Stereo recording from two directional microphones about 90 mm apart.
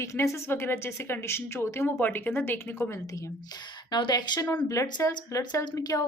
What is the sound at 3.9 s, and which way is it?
Speech, 60° left (ahead or behind).